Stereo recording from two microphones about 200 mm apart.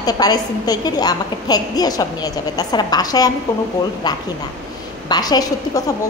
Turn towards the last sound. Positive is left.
turn(degrees=20)  # may be behind; listen again after turning